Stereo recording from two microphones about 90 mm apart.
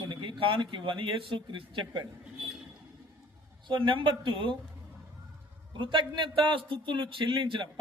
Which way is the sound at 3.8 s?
70° right (ahead or behind).